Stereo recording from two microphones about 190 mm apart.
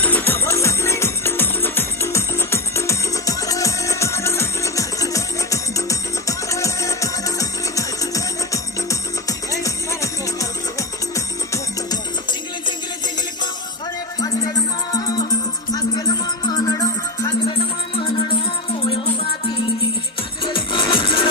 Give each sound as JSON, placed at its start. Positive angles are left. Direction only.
{"t": 0.0, "sound": "music", "side_deg": 10}
{"t": 15.0, "sound": "music", "side_deg": 20}
{"t": 20.4, "sound": "music", "side_deg": 25}